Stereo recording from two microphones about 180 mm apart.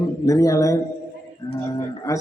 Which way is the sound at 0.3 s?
20° left (ahead or behind).